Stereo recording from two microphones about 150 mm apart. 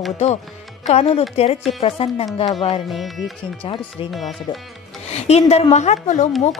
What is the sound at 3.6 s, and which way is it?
Speech, 35° left (ahead or behind).